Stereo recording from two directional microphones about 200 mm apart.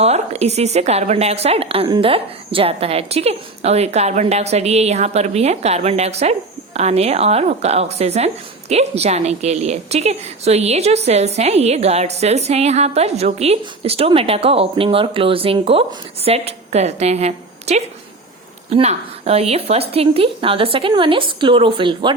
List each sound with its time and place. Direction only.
0.0 s a woman's voice: 30° right (ahead or behind)